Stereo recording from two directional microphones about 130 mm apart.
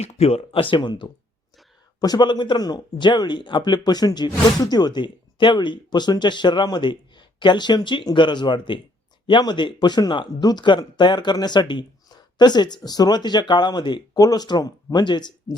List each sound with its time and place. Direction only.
0.0 s speech: 55° left (ahead or behind); by 15.5 s 35° left (ahead or behind)